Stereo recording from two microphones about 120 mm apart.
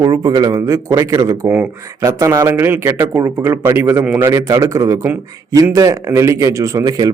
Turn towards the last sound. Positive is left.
turn(degrees=-30)  # may be behind; listen again after turning